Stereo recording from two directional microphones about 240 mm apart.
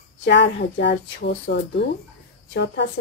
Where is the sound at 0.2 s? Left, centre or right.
Left.